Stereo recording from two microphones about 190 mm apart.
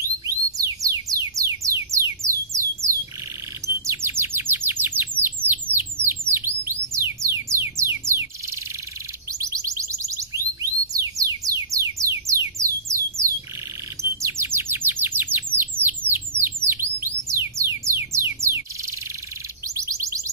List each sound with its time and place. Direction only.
0.0 s music: 15° right (ahead or behind)
2.2 s a sound: 15° right (ahead or behind)
3.6 s chirp: 15° right (ahead or behind)
7.3 s music: 15° right (ahead or behind)
9.4 s music: 15° right (ahead or behind)
14.2 s bird: 15° right (ahead or behind)
17.3 s music: 15° right (ahead or behind)
19.7 s a sound: 15° right (ahead or behind)